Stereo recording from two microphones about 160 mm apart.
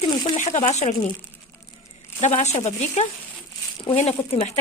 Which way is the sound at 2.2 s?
45° left (ahead or behind).